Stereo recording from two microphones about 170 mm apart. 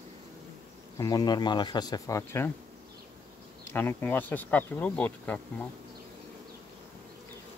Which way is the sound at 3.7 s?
10° left (ahead or behind).